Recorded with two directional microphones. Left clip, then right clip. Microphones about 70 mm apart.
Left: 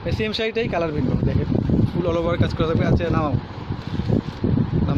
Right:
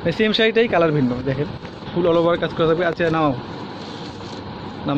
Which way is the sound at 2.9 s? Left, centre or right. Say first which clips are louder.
Right 4 dB; centre.